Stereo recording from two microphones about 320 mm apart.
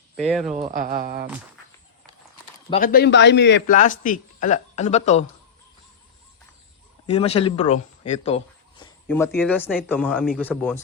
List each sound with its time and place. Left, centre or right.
0.2 s speech: centre
0.5 s speech: right
2.6 s a man's voice: left
7.1 s a man's voice: centre
8.8 s a sound: centre
9.4 s speech: centre